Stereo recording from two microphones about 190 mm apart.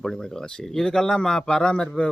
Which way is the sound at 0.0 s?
5° left (ahead or behind).